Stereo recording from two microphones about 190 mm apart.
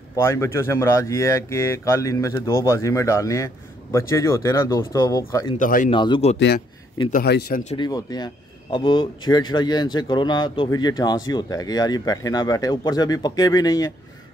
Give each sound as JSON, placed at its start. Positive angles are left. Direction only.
{"t": 0.1, "sound": "speech", "side_deg": 15}
{"t": 5.6, "sound": "speech", "side_deg": 45}
{"t": 5.9, "sound": "a man's voice", "side_deg": 25}
{"t": 7.1, "sound": "speech", "side_deg": 55}
{"t": 7.7, "sound": "a man's voice", "side_deg": 20}